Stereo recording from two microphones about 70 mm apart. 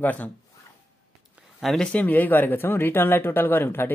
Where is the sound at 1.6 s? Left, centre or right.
Centre.